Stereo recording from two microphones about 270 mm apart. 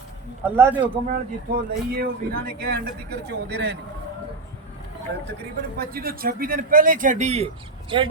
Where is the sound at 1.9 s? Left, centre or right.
Right.